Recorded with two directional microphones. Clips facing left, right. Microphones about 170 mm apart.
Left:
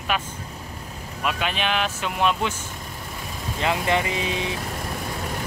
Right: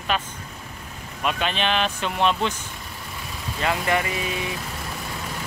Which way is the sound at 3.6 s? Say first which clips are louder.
Left 1 dB; 20° left (ahead or behind).